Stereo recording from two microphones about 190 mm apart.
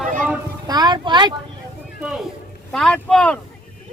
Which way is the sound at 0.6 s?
20° right (ahead or behind).